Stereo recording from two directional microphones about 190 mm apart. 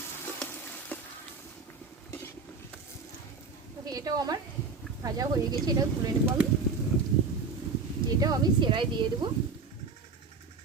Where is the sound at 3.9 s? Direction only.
20° right (ahead or behind).